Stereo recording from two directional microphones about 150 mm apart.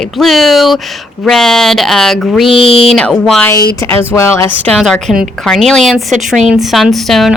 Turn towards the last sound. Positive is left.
turn(degrees=0)  # may be behind; listen again after turning